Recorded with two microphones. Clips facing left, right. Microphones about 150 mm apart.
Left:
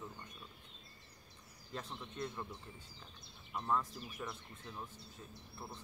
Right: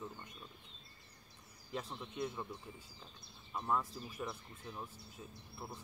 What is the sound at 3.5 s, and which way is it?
Speech, 5° right (ahead or behind).